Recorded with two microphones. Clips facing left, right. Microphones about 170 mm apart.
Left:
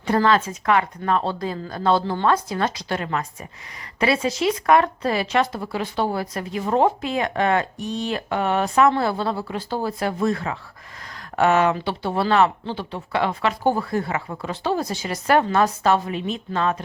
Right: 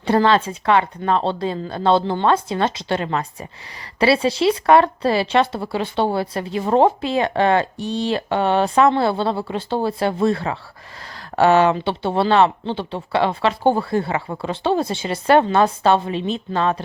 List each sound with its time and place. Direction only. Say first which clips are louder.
0.0 s speech: right 3 dB; 30° right (ahead or behind)